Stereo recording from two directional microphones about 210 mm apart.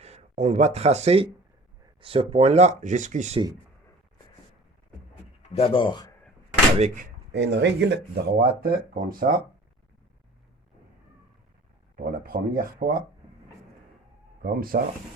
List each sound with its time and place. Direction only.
0.0 s speech: 30° right (ahead or behind)
5.5 s speech: 25° left (ahead or behind)
6.7 s speech: 30° right (ahead or behind)
7.3 s speech: 55° right (ahead or behind)
12.2 s speech: 45° right (ahead or behind)
14.4 s speech: 45° right (ahead or behind)